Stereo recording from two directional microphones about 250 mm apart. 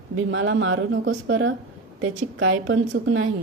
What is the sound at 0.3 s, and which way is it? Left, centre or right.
Speech, right.